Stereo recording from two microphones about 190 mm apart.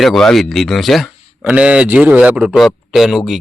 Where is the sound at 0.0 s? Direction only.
Centre (ahead or behind).